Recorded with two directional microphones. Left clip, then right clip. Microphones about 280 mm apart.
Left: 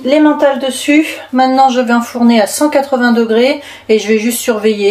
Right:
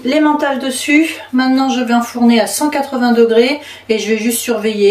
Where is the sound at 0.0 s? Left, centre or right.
Centre.